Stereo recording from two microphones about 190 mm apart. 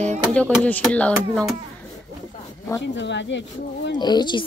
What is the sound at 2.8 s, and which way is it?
Speech, 70° left (ahead or behind).